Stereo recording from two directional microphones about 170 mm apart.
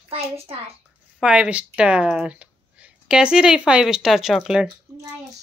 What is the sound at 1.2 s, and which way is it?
Speech, 5° right (ahead or behind).